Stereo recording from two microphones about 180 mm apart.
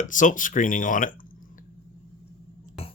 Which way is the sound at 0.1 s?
45° left (ahead or behind).